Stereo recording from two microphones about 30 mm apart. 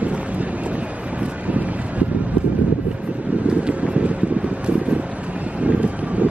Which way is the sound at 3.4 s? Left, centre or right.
Right.